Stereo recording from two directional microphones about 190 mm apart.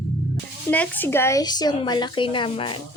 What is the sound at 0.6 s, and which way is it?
Speech, 10° left (ahead or behind).